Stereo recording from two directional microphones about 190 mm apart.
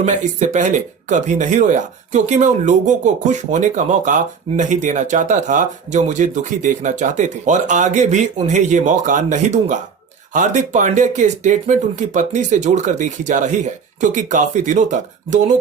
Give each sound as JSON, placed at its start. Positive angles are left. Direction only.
{"t": 0.0, "sound": "speech", "side_deg": -40}